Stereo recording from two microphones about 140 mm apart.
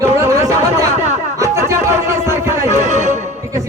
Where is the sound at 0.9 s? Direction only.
55° right (ahead or behind).